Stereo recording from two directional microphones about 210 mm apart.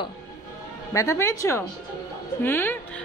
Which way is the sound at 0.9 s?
15° left (ahead or behind).